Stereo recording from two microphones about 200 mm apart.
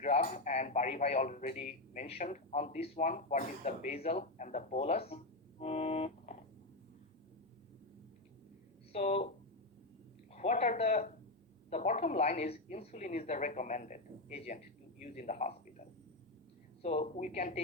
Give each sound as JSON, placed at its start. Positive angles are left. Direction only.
{"t": 0.0, "sound": "speech", "side_deg": 35}
{"t": 8.9, "sound": "speech", "side_deg": 35}
{"t": 10.3, "sound": "speech", "side_deg": 35}
{"t": 16.8, "sound": "speech", "side_deg": 35}